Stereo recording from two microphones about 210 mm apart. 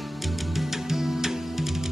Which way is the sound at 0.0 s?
Centre (ahead or behind).